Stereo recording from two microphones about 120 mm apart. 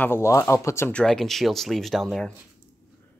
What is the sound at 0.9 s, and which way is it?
Speech, 5° left (ahead or behind).